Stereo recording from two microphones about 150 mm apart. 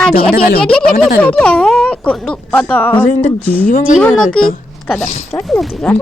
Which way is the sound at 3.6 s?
65° left (ahead or behind).